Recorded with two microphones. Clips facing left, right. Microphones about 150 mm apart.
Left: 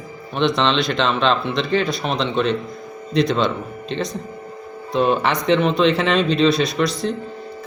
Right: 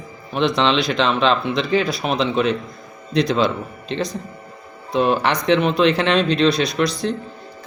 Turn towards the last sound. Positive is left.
turn(degrees=0)  # may be behind; listen again after turning